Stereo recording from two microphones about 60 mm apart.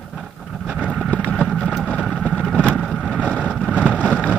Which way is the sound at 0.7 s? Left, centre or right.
Centre.